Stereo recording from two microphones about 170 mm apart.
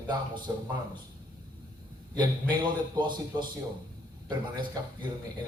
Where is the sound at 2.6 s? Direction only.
25° right (ahead or behind).